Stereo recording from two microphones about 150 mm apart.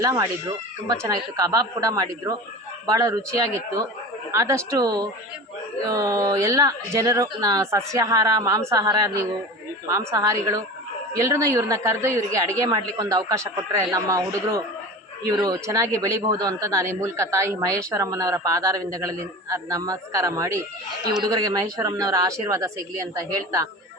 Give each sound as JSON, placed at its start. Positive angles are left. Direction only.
{"t": 0.0, "sound": "speech", "side_deg": -20}